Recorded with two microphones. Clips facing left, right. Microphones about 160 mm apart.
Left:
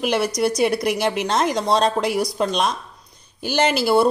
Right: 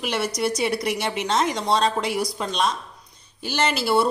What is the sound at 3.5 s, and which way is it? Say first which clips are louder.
Speech: left 4 dB; 45° left (ahead or behind).